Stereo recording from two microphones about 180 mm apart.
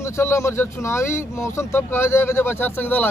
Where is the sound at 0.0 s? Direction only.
15° left (ahead or behind).